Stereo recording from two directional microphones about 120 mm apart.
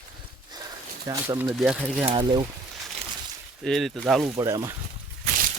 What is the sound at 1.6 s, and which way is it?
Speech, 5° right (ahead or behind).